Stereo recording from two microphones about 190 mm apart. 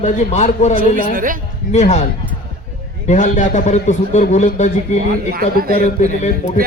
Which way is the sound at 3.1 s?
40° left (ahead or behind).